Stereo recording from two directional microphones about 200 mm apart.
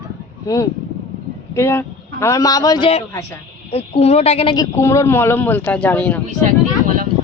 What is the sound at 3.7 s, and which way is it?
Speech, 30° left (ahead or behind).